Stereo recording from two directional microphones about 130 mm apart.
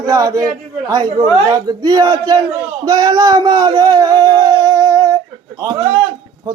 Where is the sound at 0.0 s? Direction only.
30° right (ahead or behind).